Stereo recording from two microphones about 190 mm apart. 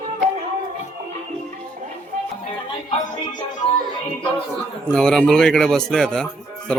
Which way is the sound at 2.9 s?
35° left (ahead or behind).